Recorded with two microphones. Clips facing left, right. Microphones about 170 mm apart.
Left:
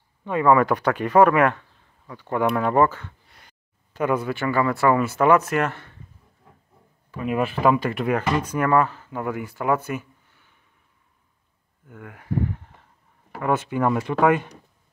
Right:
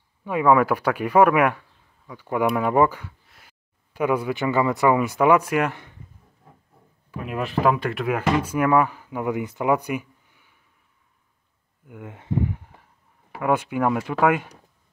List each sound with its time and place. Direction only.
0.2 s speech: 10° right (ahead or behind)
7.2 s speech: centre (ahead or behind)
11.9 s a sound: 20° right (ahead or behind)
13.3 s speech: 10° right (ahead or behind)